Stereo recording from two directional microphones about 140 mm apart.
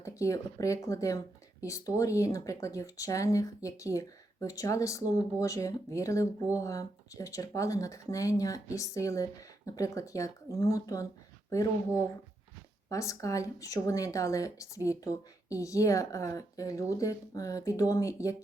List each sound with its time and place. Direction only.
0.2 s speech: 20° left (ahead or behind)
12.9 s speech: 20° left (ahead or behind)